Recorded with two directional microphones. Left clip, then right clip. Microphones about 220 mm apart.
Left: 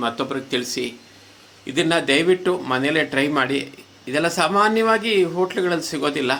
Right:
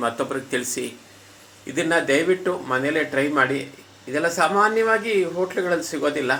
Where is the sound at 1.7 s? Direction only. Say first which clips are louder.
Left 1 dB; 45° left (ahead or behind).